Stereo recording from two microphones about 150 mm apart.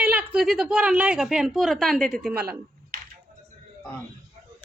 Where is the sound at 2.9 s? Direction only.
75° right (ahead or behind).